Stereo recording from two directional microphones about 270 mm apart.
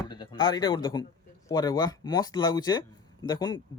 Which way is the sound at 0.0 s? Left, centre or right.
Centre.